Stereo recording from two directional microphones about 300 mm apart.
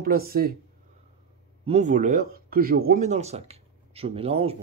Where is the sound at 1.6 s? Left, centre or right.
Right.